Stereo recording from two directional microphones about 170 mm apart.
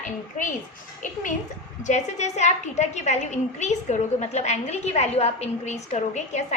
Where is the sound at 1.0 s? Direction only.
50° left (ahead or behind).